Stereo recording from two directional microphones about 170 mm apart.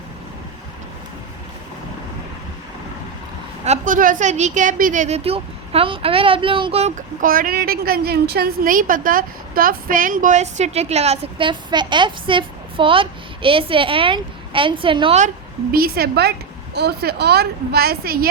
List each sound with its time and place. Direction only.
3.6 s a woman's voice: 45° right (ahead or behind)
11.3 s a woman's voice: 30° right (ahead or behind)
15.7 s a woman's voice: 65° right (ahead or behind)